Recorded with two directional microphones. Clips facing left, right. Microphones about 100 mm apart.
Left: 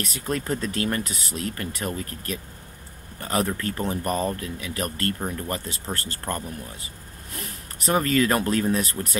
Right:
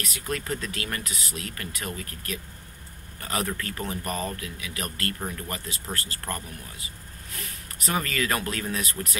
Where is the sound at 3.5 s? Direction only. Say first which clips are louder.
Left 5 dB; 25° left (ahead or behind).